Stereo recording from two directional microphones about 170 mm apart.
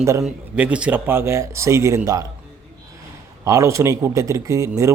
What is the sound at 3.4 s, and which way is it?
Speech, 20° right (ahead or behind).